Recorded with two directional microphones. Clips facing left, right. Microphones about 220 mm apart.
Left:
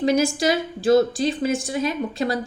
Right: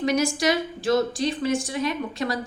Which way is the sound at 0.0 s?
25° left (ahead or behind).